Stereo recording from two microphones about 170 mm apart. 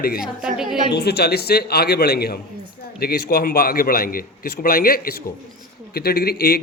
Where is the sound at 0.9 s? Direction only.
75° left (ahead or behind).